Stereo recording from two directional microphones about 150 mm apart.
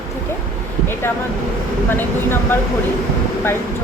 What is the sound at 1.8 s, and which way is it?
Speech, 15° left (ahead or behind).